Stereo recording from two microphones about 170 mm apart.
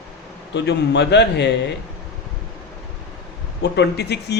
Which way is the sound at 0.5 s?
90° left.